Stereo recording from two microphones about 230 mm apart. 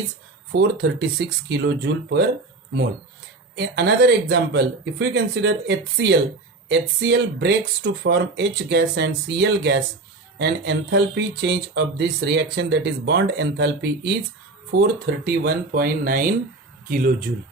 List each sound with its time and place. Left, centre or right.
0.5 s speech: right
3.5 s speech: right